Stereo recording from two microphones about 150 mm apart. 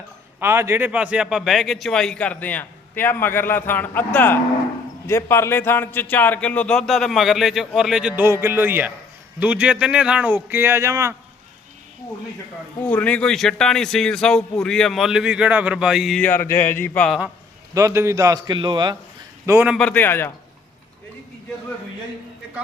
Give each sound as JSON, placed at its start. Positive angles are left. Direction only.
{"t": 0.3, "sound": "a man's voice", "side_deg": -15}
{"t": 12.8, "sound": "a man's voice", "side_deg": 10}
{"t": 16.2, "sound": "speech", "side_deg": 15}
{"t": 17.1, "sound": "a man's voice", "side_deg": 0}
{"t": 17.7, "sound": "a man's voice", "side_deg": -20}
{"t": 19.5, "sound": "speech", "side_deg": -10}
{"t": 19.8, "sound": "speech", "side_deg": 10}